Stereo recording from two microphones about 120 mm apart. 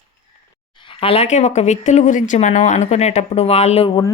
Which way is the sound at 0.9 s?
50° left (ahead or behind).